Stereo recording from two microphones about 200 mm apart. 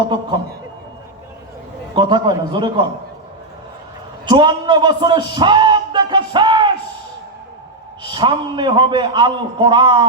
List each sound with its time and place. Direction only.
2.0 s a man's voice: 25° right (ahead or behind)
4.3 s a man's voice: 20° right (ahead or behind)
8.1 s a man's voice: 20° right (ahead or behind)